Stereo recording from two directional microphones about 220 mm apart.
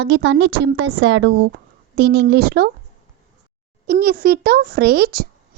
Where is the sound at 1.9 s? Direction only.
45° right (ahead or behind).